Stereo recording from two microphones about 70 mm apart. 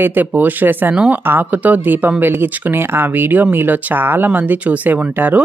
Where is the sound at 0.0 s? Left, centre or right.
Right.